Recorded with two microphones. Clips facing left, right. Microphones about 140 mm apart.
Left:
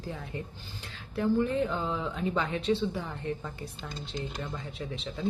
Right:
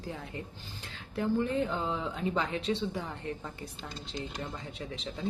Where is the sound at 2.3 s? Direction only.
30° right (ahead or behind).